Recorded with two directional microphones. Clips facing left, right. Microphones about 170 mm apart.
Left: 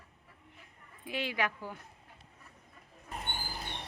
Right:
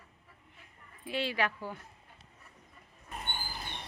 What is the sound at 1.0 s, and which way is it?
Speech, 15° left (ahead or behind).